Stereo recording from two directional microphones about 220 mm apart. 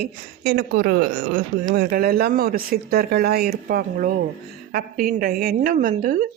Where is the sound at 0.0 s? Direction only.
45° right (ahead or behind).